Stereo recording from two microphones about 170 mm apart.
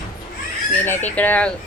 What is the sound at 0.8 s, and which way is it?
Speech, 10° left (ahead or behind).